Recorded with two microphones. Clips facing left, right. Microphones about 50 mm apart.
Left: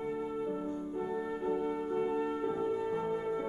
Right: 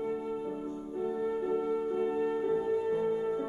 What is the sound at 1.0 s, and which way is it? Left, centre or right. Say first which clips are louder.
Music: right 5 dB; centre.